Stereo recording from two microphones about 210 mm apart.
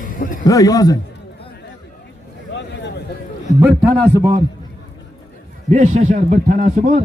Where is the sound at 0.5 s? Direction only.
15° left (ahead or behind).